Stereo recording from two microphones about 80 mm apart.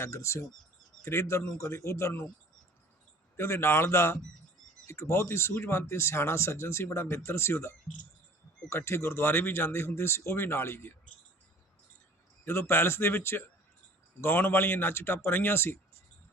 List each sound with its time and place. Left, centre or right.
0.0 s speech: left
3.3 s speech: left
8.7 s speech: left
12.5 s a man's voice: left